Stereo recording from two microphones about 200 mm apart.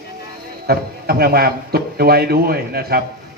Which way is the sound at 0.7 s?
50° right (ahead or behind).